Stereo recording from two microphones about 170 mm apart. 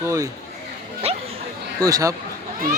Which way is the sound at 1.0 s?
35° right (ahead or behind).